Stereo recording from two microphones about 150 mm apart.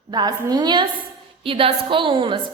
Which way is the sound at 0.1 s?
25° right (ahead or behind).